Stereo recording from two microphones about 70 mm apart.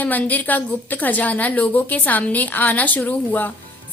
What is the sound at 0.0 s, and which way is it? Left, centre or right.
A woman's voice, left.